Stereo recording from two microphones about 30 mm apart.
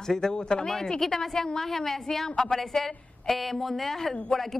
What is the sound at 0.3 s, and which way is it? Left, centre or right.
A woman's voice, left.